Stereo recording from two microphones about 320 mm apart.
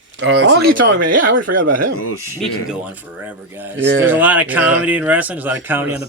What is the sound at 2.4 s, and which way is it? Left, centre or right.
Speech, centre.